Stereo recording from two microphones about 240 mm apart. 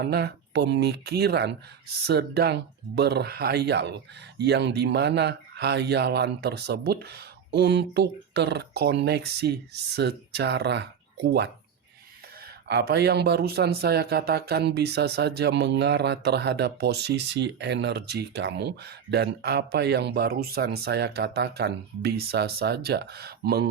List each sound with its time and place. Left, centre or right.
0.0 s speech: right